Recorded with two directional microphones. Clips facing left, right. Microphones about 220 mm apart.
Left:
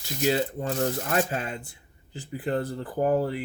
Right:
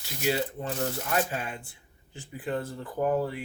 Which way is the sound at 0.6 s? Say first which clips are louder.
Left 4 dB; 50° left (ahead or behind).